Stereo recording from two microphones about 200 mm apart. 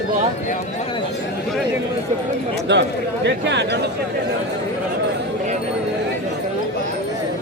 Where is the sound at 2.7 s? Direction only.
60° right (ahead or behind).